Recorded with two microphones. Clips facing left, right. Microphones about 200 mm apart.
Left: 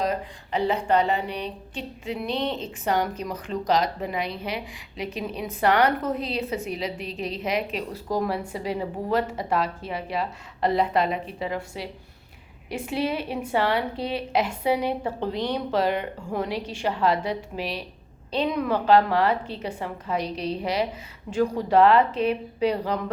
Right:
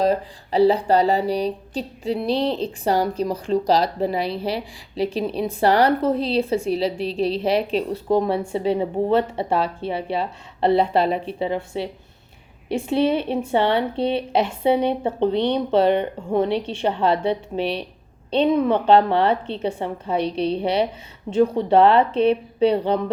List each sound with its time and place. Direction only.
0.0 s a woman's voice: 35° right (ahead or behind)